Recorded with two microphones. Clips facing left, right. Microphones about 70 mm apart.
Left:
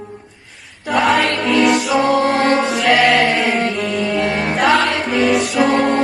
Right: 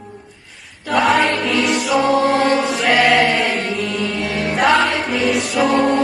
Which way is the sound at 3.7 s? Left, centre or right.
Centre.